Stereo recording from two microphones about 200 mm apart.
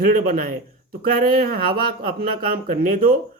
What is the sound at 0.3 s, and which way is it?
Speech, 45° right (ahead or behind).